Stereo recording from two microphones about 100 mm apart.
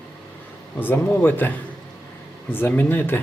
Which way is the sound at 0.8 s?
20° left (ahead or behind).